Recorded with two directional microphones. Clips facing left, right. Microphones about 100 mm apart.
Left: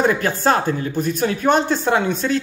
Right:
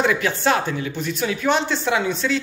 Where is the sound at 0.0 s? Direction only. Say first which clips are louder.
Left 2 dB; 40° left (ahead or behind).